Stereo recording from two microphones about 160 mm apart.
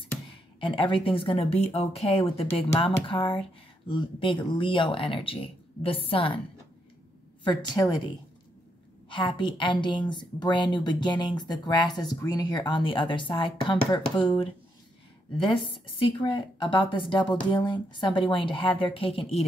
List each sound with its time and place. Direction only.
0.6 s speech: 30° left (ahead or behind)
7.4 s a woman's voice: 25° left (ahead or behind)
9.1 s a woman's voice: 30° left (ahead or behind)
16.1 s speech: 30° left (ahead or behind)